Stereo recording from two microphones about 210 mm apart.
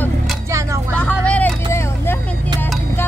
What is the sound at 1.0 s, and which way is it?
Vehicle, 5° left (ahead or behind).